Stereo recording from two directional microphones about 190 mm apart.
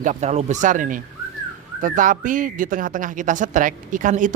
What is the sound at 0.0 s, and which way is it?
Speech, 40° right (ahead or behind).